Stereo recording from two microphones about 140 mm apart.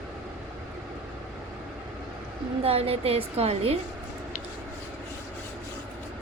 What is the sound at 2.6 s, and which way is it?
A woman's voice, 45° right (ahead or behind).